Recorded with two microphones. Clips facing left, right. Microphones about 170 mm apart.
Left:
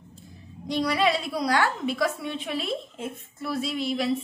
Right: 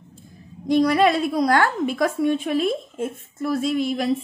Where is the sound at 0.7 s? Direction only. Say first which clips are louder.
Right 7 dB; 50° right (ahead or behind).